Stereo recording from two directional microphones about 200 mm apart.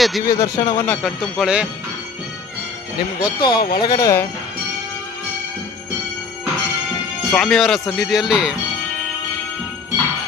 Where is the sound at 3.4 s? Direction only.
20° left (ahead or behind).